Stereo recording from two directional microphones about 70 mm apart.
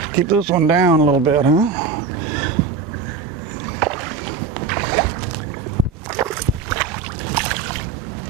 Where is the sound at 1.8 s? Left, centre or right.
Centre.